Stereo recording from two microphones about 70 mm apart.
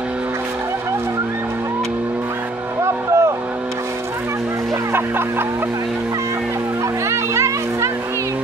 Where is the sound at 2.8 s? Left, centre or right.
Right.